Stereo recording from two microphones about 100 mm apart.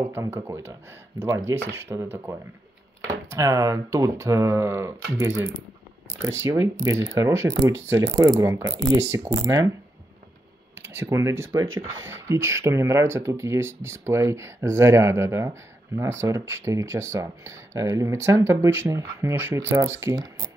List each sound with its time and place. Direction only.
0.0 s speech: 25° right (ahead or behind)
10.7 s speech: 25° right (ahead or behind)